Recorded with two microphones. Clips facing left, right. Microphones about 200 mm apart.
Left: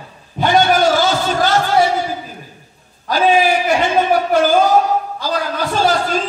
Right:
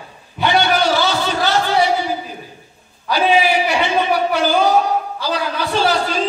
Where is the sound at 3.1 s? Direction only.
45° left (ahead or behind).